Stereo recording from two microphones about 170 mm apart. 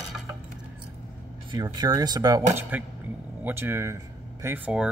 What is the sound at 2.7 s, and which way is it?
A man's voice, 10° right (ahead or behind).